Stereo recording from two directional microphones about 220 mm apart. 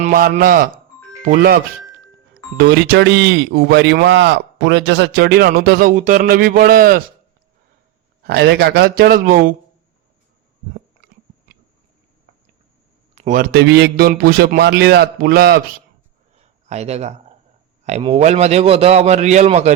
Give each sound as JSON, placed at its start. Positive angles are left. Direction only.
{"t": 0.0, "sound": "speech", "side_deg": -40}
{"t": 8.2, "sound": "speech", "side_deg": -50}
{"t": 13.1, "sound": "speech", "side_deg": -35}
{"t": 16.3, "sound": "a sound", "side_deg": -30}
{"t": 17.8, "sound": "a man's voice", "side_deg": -30}